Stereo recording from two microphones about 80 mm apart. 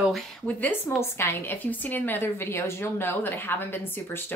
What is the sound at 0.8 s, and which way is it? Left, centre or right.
A woman's voice, left.